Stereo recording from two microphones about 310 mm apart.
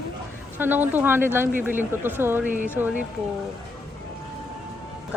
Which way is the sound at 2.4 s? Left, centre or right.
Right.